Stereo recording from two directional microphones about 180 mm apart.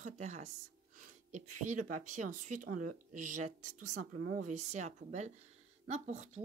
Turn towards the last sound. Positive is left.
turn(degrees=-40)  # may be behind; listen again after turning